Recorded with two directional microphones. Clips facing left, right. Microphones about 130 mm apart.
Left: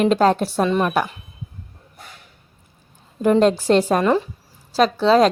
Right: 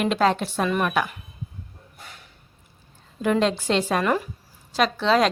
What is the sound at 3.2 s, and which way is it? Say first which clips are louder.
A woman's voice: left 6 dB; 45° left (ahead or behind).